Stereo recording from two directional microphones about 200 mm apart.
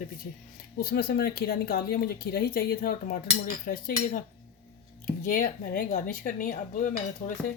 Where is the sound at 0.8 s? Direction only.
50° left (ahead or behind).